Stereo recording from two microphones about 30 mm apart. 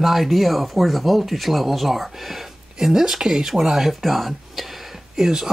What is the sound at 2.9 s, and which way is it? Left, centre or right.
Speech, centre.